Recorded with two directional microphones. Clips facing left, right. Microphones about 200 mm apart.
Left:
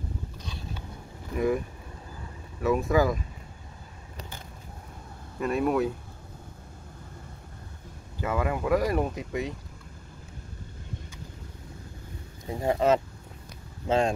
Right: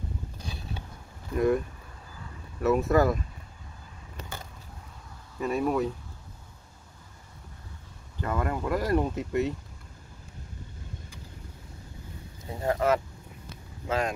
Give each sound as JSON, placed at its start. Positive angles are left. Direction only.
{"t": 1.3, "sound": "speech", "side_deg": 5}
{"t": 2.6, "sound": "speech", "side_deg": 0}
{"t": 5.4, "sound": "speech", "side_deg": 0}
{"t": 8.2, "sound": "speech", "side_deg": 5}
{"t": 12.4, "sound": "speech", "side_deg": 15}